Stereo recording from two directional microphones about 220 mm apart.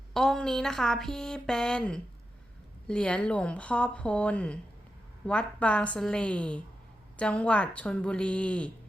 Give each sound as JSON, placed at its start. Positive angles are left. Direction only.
{"t": 0.1, "sound": "a woman's voice", "side_deg": 0}